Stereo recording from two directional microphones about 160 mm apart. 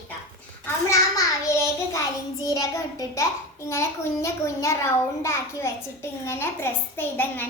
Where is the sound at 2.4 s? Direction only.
20° left (ahead or behind).